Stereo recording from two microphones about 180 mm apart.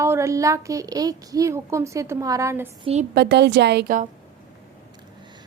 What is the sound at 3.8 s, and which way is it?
Speech, 45° right (ahead or behind).